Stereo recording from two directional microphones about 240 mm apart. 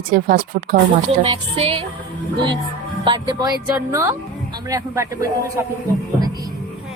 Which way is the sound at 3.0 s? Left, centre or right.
Centre.